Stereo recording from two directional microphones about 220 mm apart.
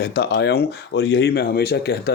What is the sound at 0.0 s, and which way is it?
Speech, 50° left (ahead or behind).